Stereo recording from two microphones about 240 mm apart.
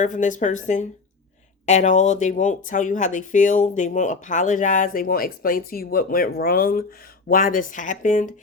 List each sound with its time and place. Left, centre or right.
0.0 s speech: left